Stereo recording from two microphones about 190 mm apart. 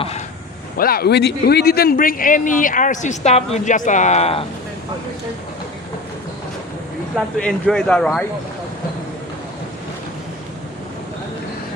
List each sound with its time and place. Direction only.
0.8 s a man's voice: 55° left (ahead or behind); by 4.4 s 35° left (ahead or behind)
7.3 s speech: 5° left (ahead or behind)